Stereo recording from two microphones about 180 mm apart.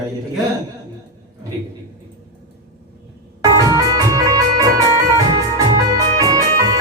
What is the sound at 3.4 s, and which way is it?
Organ, 20° right (ahead or behind).